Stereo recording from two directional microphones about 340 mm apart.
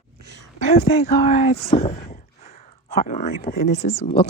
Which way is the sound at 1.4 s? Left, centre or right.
Left.